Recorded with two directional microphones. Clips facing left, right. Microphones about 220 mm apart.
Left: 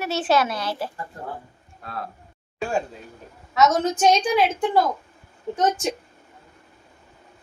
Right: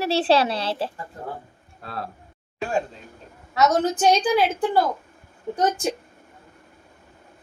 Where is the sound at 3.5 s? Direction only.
35° right (ahead or behind).